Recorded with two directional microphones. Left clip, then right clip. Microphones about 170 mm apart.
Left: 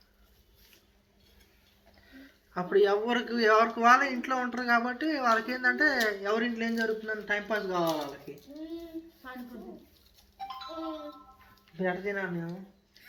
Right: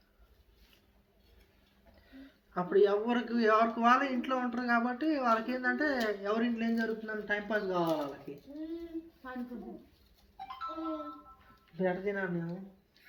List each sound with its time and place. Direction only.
2.1 s speech: 20° left (ahead or behind)
11.8 s speech: 15° left (ahead or behind)